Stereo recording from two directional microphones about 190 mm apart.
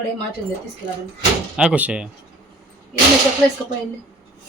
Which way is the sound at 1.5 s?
5° right (ahead or behind).